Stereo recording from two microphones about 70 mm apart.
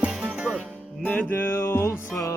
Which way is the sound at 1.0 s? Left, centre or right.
Centre.